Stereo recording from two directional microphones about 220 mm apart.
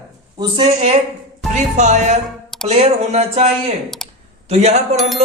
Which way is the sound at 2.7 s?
30° right (ahead or behind).